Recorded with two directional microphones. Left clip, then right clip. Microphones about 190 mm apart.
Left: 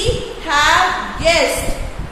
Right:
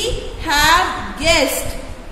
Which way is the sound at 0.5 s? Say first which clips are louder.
Left 1 dB; 35° right (ahead or behind).